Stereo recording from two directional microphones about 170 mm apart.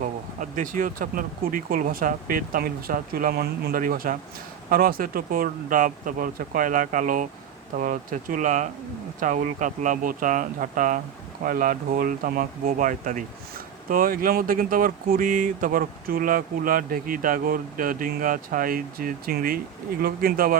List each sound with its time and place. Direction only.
0.0 s speech: 50° right (ahead or behind)